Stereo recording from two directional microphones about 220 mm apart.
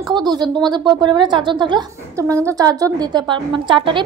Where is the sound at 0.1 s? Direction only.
20° right (ahead or behind).